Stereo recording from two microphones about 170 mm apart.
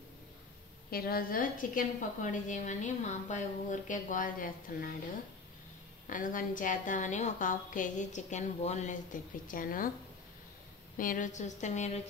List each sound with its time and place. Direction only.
0.8 s a woman's voice: 60° left (ahead or behind)
6.0 s a woman's voice: 50° left (ahead or behind)
11.0 s a woman's voice: 50° left (ahead or behind)